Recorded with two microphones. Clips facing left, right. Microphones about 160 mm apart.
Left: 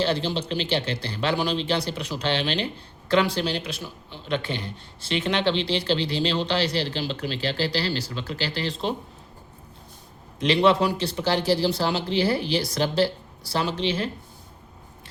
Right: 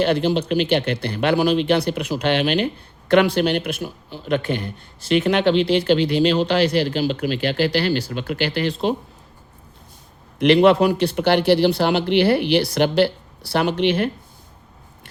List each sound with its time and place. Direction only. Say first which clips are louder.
0.0 s speech: right 6 dB; 55° right (ahead or behind)
10.4 s speech: right 6 dB; 55° right (ahead or behind)